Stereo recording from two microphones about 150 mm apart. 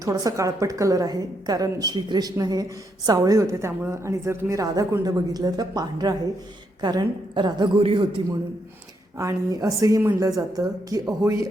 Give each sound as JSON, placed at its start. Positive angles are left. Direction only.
{"t": 0.0, "sound": "a woman's voice", "side_deg": -20}
{"t": 9.1, "sound": "a woman's voice", "side_deg": -20}